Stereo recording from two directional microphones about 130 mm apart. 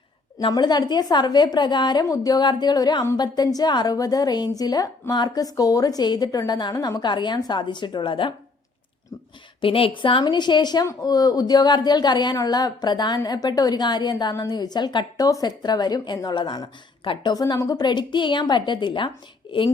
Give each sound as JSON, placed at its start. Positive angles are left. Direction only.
{"t": 0.4, "sound": "a woman's voice", "side_deg": 35}
{"t": 9.6, "sound": "a woman's voice", "side_deg": 45}